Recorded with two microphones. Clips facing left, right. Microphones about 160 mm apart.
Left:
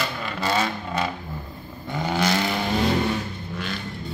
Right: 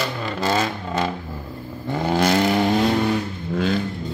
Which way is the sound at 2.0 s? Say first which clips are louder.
Right 5 dB; 50° right (ahead or behind).